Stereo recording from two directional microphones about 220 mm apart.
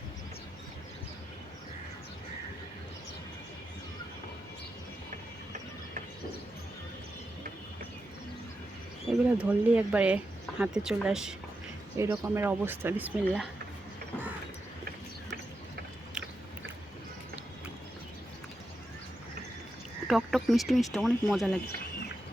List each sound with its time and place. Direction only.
9.1 s a sound: centre (ahead or behind)
9.4 s speech: 5° right (ahead or behind)
20.1 s speech: centre (ahead or behind)